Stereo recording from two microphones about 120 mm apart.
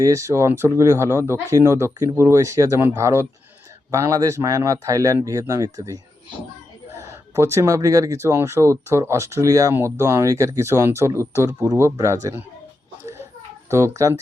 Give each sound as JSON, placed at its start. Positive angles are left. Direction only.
{"t": 0.0, "sound": "speech", "side_deg": -25}
{"t": 7.3, "sound": "speech", "side_deg": -25}
{"t": 13.7, "sound": "speech", "side_deg": -25}